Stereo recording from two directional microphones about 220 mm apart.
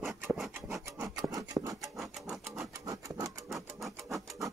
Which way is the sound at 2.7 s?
15° right (ahead or behind).